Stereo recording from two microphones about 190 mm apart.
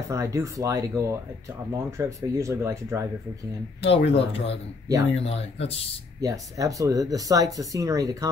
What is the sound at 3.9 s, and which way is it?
Speech, 30° left (ahead or behind).